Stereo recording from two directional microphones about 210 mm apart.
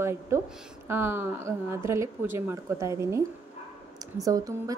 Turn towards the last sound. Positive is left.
turn(degrees=-15)  # may be behind; listen again after turning